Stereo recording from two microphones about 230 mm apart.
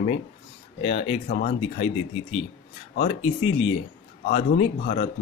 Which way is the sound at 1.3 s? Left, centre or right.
Left.